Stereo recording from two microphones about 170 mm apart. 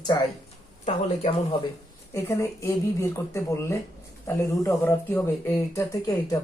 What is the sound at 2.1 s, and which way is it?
Speech, 15° left (ahead or behind).